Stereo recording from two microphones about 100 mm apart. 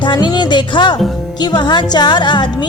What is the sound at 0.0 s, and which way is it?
Speech, 50° left (ahead or behind).